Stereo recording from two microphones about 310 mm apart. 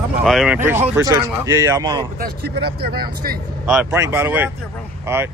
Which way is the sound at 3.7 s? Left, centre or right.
Centre.